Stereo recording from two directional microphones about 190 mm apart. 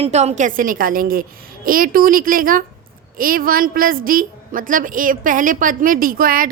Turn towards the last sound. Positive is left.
turn(degrees=-50)  # may be behind; listen again after turning